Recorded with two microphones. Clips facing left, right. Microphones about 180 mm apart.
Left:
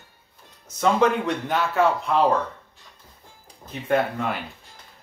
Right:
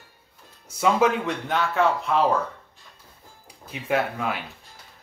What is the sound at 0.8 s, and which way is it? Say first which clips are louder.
Speech: left 1 dB; 5° right (ahead or behind).